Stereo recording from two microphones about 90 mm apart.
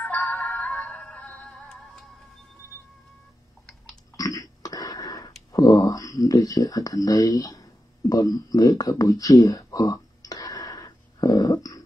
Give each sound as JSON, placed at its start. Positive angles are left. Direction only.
{"t": 0.0, "sound": "music", "side_deg": 15}
{"t": 4.2, "sound": "burping", "side_deg": 40}
{"t": 5.5, "sound": "a sound", "side_deg": 40}
{"t": 5.9, "sound": "speech", "side_deg": 40}